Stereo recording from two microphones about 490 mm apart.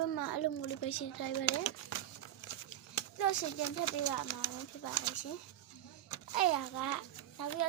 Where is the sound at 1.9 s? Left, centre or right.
Left.